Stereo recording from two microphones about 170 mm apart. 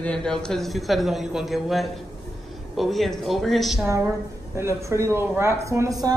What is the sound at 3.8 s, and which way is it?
A woman's voice, 15° right (ahead or behind).